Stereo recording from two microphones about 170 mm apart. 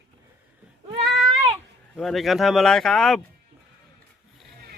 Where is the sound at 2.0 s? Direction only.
Centre (ahead or behind).